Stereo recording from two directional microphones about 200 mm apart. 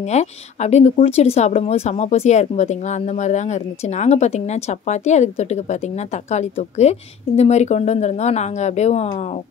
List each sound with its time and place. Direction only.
0.0 s speech: 35° left (ahead or behind)